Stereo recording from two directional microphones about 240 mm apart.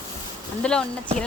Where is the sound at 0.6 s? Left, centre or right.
Centre.